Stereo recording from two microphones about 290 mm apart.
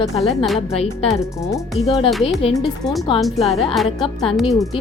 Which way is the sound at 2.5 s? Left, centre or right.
Centre.